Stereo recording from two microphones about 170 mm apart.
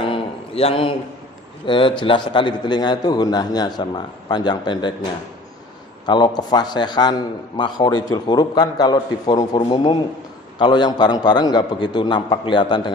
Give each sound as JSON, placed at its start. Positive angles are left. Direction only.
{"t": 0.1, "sound": "a sound", "side_deg": 35}
{"t": 1.7, "sound": "a man's voice", "side_deg": 30}
{"t": 6.0, "sound": "a man's voice", "side_deg": 25}